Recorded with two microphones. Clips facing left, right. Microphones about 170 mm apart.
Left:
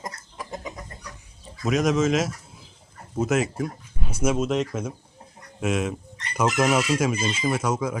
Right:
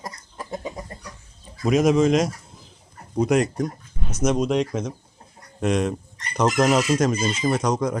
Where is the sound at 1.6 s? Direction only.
Centre (ahead or behind).